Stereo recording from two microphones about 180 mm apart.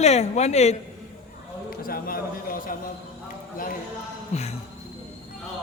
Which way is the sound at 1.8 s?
55° left (ahead or behind).